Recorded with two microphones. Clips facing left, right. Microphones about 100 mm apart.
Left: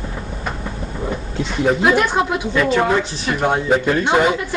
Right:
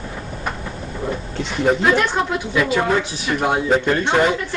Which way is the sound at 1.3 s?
Centre (ahead or behind).